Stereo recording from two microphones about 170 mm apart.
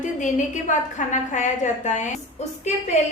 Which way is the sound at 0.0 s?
45° left (ahead or behind).